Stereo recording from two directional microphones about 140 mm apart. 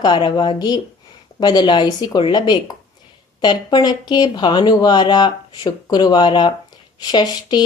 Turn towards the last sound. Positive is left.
turn(degrees=30)  # may be behind; listen again after turning